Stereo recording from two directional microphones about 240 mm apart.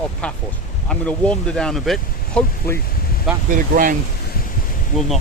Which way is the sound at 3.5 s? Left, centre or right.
Right.